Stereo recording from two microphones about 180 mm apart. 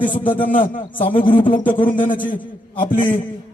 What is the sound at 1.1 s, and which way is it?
A man's voice, 45° left (ahead or behind).